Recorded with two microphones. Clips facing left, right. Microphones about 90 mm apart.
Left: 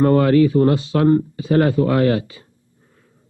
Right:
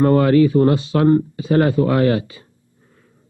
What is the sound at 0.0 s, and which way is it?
A man's voice, 30° right (ahead or behind).